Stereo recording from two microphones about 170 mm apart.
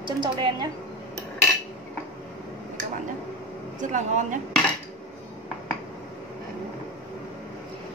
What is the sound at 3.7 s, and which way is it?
Speech, 45° right (ahead or behind).